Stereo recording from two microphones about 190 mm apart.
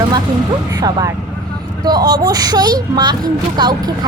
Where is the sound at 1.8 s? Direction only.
20° right (ahead or behind).